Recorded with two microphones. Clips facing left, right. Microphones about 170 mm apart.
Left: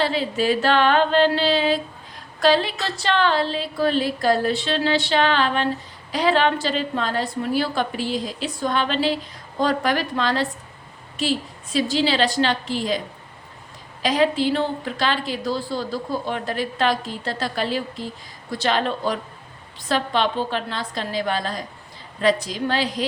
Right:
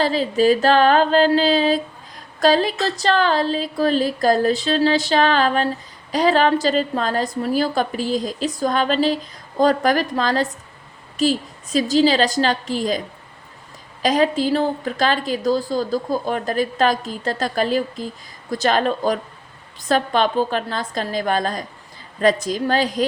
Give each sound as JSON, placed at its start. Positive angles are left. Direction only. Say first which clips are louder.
{"t": 0.0, "sound": "a woman's voice", "louder": "right 4 dB", "side_deg": -40}
{"t": 14.0, "sound": "a woman's voice", "louder": "right 2 dB", "side_deg": -45}